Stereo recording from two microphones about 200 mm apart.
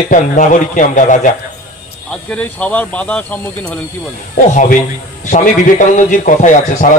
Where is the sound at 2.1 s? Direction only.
5° left (ahead or behind).